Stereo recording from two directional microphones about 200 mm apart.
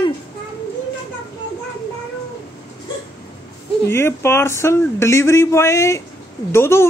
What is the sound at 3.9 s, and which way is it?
Speech, 10° left (ahead or behind).